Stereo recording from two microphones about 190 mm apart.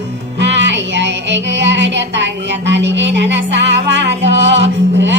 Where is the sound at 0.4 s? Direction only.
70° right (ahead or behind).